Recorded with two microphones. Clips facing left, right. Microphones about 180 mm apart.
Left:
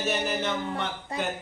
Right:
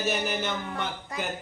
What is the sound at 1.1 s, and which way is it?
Speech, 30° left (ahead or behind).